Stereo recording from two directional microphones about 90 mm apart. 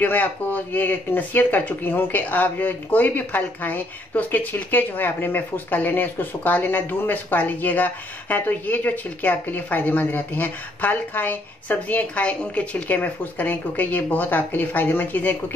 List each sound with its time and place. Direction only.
0.0 s speech: 20° left (ahead or behind)